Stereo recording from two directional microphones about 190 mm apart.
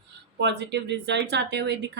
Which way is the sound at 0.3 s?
65° right (ahead or behind).